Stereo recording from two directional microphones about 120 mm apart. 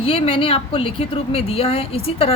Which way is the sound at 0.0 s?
50° left (ahead or behind).